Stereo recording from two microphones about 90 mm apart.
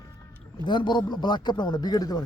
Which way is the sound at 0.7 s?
60° left (ahead or behind).